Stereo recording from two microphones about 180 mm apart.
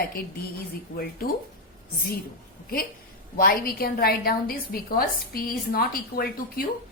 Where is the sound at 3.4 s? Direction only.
55° left (ahead or behind).